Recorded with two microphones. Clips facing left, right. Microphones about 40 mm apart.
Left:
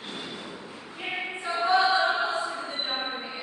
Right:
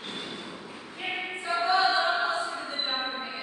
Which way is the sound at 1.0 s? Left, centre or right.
Centre.